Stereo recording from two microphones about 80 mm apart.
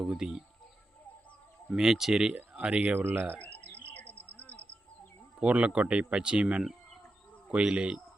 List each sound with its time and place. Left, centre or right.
0.0 s speech: centre
1.7 s speech: centre
3.4 s bird: left
5.4 s speech: centre